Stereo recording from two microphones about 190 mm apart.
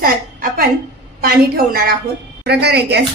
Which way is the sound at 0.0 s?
50° right (ahead or behind).